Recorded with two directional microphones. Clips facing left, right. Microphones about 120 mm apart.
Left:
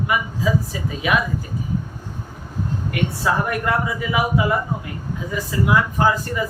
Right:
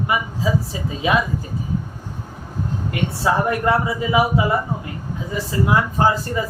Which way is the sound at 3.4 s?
25° right (ahead or behind).